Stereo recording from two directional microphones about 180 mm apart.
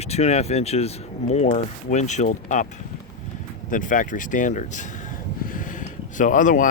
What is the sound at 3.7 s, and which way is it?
Speech, 45° left (ahead or behind).